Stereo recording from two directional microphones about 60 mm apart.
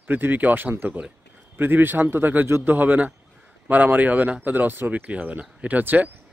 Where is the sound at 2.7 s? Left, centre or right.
Right.